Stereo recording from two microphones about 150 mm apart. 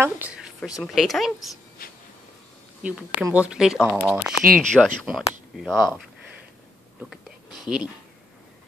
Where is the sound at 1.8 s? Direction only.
75° left (ahead or behind).